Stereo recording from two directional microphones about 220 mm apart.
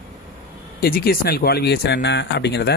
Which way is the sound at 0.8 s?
45° left (ahead or behind).